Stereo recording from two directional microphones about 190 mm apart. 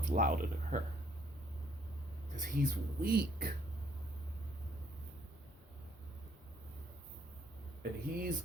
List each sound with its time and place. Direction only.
0.0 s speech: 40° right (ahead or behind)
2.3 s speech: 45° right (ahead or behind)
7.8 s speech: 50° right (ahead or behind)